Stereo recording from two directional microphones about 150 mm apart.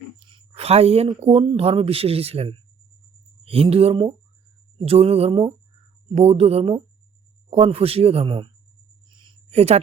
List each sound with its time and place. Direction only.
0.3 s speech: 40° right (ahead or behind)
9.0 s a sound: 30° right (ahead or behind)
9.5 s speech: 45° right (ahead or behind)